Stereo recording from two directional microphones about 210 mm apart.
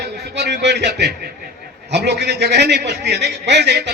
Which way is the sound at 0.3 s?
55° right (ahead or behind).